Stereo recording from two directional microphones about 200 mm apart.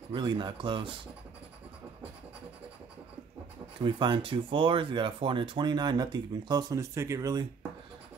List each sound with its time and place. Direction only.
0.1 s speech: 25° right (ahead or behind)
3.8 s speech: 25° right (ahead or behind)